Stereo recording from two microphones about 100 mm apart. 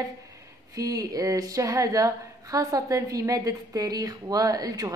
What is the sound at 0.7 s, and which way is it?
A woman's voice, 35° right (ahead or behind).